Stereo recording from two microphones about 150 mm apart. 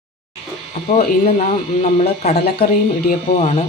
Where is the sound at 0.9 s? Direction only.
50° left (ahead or behind).